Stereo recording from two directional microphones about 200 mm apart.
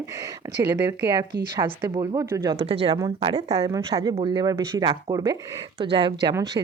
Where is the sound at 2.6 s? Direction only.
30° right (ahead or behind).